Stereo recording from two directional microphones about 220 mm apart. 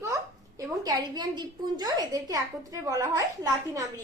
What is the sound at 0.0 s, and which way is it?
A woman's voice, 15° right (ahead or behind).